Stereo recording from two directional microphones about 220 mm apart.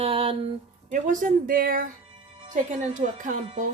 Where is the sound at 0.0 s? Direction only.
25° right (ahead or behind).